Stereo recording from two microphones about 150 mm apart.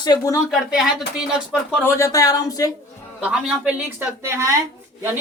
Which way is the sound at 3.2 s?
5° right (ahead or behind).